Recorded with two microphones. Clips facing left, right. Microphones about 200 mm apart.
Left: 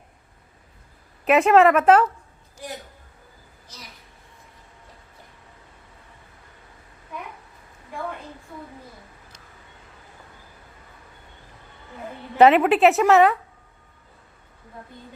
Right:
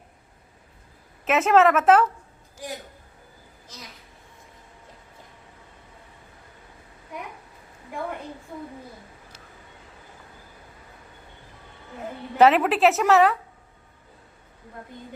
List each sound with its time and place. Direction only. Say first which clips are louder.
1.2 s a woman's voice: left 3 dB; centre (ahead or behind)
12.4 s a woman's voice: left 3 dB; centre (ahead or behind)